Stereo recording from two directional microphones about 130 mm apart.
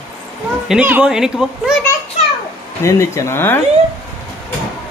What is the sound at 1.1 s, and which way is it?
Speech, 5° right (ahead or behind).